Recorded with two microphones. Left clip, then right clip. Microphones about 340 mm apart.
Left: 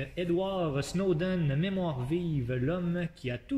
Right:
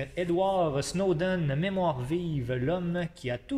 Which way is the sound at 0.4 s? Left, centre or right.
Centre.